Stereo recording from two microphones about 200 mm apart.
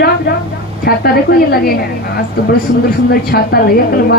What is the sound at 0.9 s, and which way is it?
Speech, 50° left (ahead or behind).